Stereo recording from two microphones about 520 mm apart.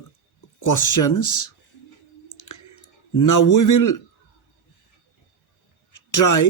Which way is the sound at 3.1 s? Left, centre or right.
Left.